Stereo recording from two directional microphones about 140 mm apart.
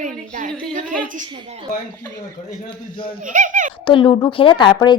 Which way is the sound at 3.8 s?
35° left (ahead or behind).